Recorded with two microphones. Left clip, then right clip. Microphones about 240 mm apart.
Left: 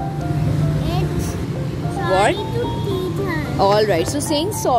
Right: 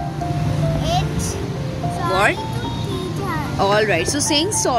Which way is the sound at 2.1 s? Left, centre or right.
Centre.